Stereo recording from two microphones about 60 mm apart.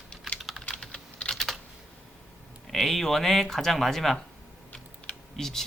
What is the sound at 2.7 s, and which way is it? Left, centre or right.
A man's voice, centre.